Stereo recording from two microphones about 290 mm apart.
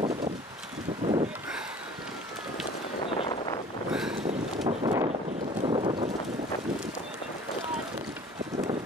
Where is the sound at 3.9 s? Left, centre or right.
Centre.